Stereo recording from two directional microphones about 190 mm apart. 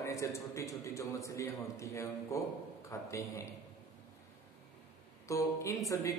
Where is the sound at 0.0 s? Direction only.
15° left (ahead or behind).